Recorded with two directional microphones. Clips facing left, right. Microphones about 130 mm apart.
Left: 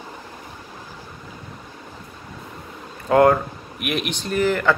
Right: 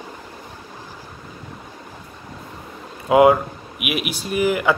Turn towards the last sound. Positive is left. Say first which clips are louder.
# right 1 dB
turn(degrees=-10)  # may be behind; listen again after turning